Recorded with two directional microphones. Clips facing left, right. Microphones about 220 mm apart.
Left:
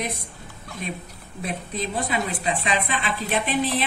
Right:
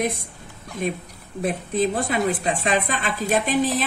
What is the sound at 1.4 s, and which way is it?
Speech, 50° right (ahead or behind).